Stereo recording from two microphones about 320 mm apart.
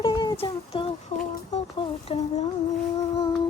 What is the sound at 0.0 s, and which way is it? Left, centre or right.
Child singing, centre.